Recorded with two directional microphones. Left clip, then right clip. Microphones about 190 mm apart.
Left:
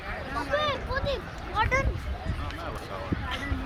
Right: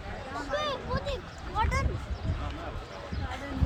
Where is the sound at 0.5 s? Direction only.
45° right (ahead or behind).